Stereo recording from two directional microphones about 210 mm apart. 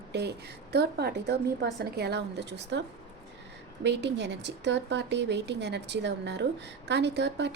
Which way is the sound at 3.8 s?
55° right (ahead or behind).